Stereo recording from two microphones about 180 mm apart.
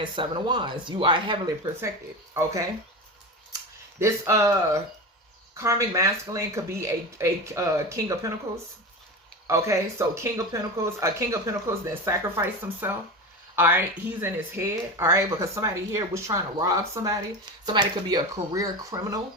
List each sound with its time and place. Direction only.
0.0 s speech: 25° right (ahead or behind)
4.0 s speech: 15° right (ahead or behind)
9.5 s speech: 15° right (ahead or behind)